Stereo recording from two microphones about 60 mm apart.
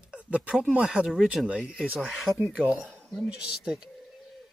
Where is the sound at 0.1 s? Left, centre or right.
Right.